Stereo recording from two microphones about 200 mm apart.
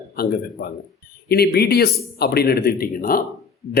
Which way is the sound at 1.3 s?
50° left (ahead or behind).